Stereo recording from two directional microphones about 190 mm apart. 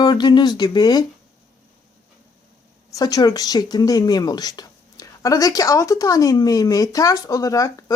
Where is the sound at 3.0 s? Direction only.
20° left (ahead or behind).